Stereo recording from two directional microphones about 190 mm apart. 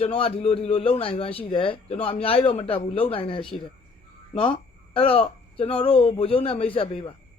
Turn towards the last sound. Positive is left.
turn(degrees=25)  # may be behind; listen again after turning